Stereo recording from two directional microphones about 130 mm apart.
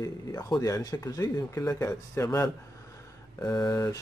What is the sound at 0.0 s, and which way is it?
Speech, 25° left (ahead or behind).